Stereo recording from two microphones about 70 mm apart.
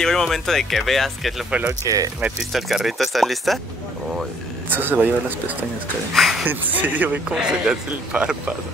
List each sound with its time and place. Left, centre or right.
0.0 s speech: centre
1.7 s speech: right
2.5 s speech: centre
4.6 s speech: right
6.1 s speech: centre
6.4 s speech: right
7.3 s speech: centre